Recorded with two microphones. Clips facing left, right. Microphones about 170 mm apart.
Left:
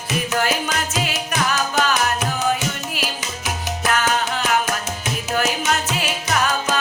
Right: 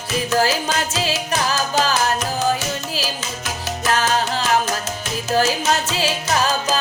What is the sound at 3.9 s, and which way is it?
Music, 30° right (ahead or behind).